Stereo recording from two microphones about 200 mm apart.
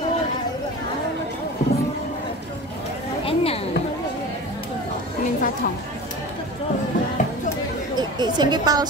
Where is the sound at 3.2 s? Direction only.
30° left (ahead or behind).